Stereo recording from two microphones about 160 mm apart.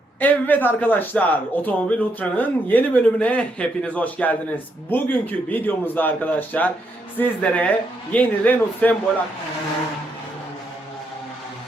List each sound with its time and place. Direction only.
0.2 s speech: 10° left (ahead or behind)